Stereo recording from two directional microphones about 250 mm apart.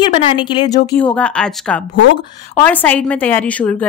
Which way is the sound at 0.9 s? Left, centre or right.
Centre.